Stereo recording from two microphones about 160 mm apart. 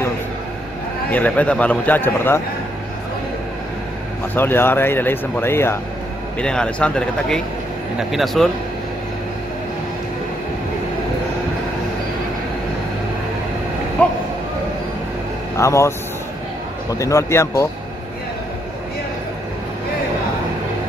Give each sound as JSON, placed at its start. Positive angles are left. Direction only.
{"t": 1.1, "sound": "speech", "side_deg": 10}
{"t": 4.4, "sound": "speech", "side_deg": 15}
{"t": 6.4, "sound": "speech", "side_deg": 5}
{"t": 15.5, "sound": "speech", "side_deg": 20}
{"t": 17.0, "sound": "speech", "side_deg": 20}